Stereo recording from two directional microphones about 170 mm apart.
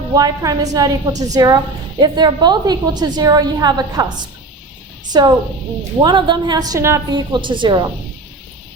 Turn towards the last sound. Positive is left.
turn(degrees=-25)  # may be behind; listen again after turning